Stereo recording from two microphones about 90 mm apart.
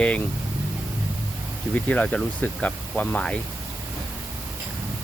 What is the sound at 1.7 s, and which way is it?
Speech, 15° left (ahead or behind).